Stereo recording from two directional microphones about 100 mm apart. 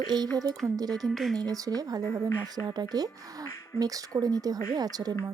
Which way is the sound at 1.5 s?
40° right (ahead or behind).